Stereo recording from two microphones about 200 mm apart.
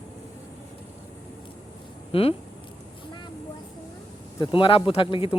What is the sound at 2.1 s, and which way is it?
Speech, 30° left (ahead or behind).